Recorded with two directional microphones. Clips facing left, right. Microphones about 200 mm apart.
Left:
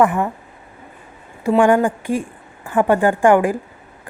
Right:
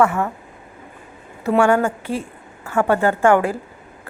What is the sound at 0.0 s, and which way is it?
Speech, 15° left (ahead or behind).